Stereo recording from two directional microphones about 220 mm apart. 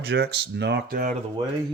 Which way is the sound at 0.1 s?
50° right (ahead or behind).